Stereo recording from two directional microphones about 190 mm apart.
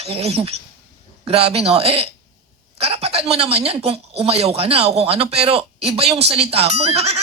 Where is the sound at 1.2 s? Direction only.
30° right (ahead or behind).